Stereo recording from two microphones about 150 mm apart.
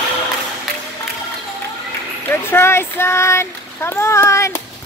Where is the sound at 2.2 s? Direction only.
15° left (ahead or behind).